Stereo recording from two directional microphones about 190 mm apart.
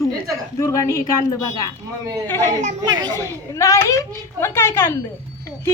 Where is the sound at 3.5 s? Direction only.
15° left (ahead or behind).